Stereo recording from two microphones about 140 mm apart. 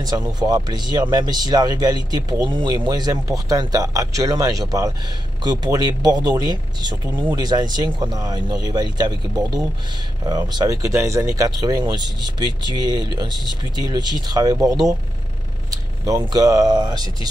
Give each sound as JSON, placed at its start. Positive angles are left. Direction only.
{"t": 0.0, "sound": "speech", "side_deg": -30}